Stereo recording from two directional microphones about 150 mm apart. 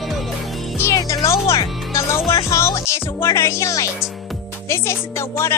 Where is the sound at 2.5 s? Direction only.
20° left (ahead or behind).